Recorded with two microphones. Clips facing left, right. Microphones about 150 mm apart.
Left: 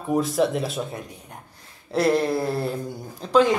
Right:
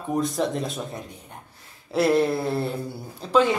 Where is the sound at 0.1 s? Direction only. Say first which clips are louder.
Left 3 dB; 5° left (ahead or behind).